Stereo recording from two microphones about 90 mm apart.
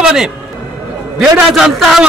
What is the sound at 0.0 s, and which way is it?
A man's voice, 5° right (ahead or behind).